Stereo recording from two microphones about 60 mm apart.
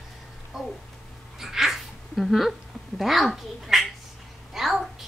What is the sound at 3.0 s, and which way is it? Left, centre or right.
Speech, centre.